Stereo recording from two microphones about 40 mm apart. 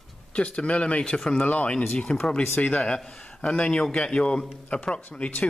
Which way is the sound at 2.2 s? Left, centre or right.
Centre.